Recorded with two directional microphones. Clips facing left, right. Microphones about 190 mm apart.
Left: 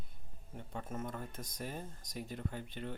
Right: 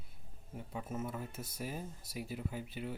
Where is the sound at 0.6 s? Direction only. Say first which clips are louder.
Right 2 dB; 5° right (ahead or behind).